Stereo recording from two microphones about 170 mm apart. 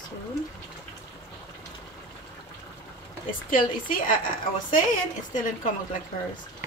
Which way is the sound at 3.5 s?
55° left (ahead or behind).